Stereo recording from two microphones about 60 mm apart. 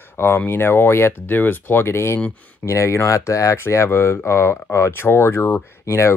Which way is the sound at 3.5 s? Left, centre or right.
Left.